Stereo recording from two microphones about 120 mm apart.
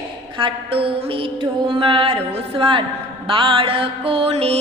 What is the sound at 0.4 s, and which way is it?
Mantra, 45° right (ahead or behind).